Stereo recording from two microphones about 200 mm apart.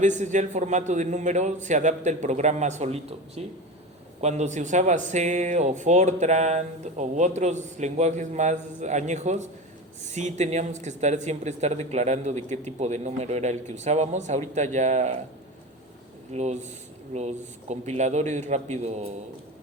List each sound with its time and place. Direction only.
0.0 s speech: 35° right (ahead or behind)
16.3 s speech: 35° right (ahead or behind)